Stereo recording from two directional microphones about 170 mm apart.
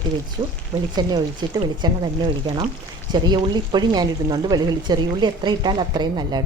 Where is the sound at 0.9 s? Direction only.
25° right (ahead or behind).